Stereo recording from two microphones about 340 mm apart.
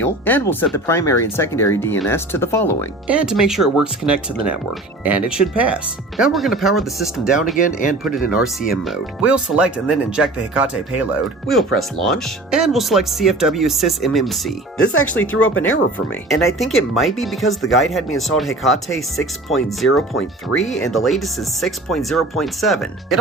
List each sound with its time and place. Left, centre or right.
0.0 s speech: centre
5.3 s speech: centre
15.4 s speech: left
16.3 s speech: centre
19.8 s speech: left
20.7 s speech: centre